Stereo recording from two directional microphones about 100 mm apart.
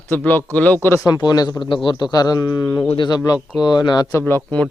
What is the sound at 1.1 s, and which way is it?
Speech, 40° left (ahead or behind).